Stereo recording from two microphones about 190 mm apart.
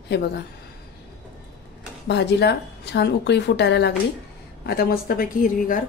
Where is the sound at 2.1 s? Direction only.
65° left (ahead or behind).